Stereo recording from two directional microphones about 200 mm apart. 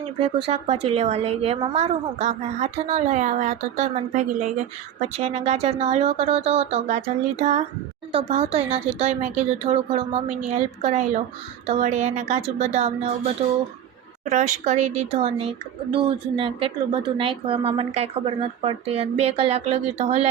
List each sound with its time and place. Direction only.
0.2 s a woman's voice: 30° right (ahead or behind)
14.3 s a woman's voice: 40° right (ahead or behind)